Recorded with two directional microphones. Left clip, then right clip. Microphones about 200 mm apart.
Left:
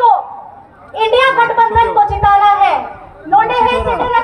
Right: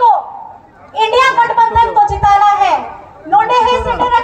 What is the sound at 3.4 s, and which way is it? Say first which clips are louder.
Chatter: right 2 dB; 45° right (ahead or behind).